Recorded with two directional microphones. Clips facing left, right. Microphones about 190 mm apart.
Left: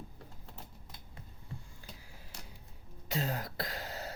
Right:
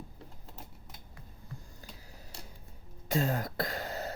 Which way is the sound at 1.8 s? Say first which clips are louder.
Right 2 dB; 40° right (ahead or behind).